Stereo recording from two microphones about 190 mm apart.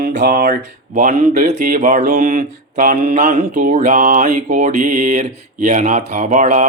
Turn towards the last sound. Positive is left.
turn(degrees=-40)  # may be behind; listen again after turning